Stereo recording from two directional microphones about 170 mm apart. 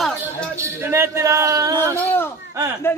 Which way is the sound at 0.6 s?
15° right (ahead or behind).